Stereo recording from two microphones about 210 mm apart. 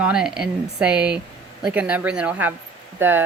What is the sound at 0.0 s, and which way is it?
Speech, 5° right (ahead or behind).